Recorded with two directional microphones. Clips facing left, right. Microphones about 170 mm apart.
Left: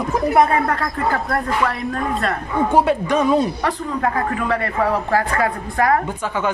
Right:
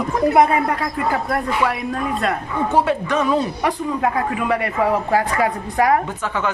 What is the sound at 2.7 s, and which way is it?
Speech, 15° left (ahead or behind).